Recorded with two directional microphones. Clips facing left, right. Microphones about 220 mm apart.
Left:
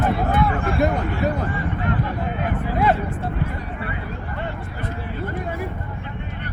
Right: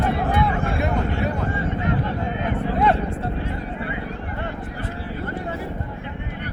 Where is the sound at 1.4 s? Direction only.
25° right (ahead or behind).